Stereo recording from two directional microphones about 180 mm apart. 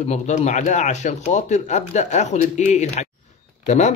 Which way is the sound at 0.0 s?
40° left (ahead or behind).